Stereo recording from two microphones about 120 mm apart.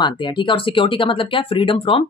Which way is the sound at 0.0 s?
40° left (ahead or behind).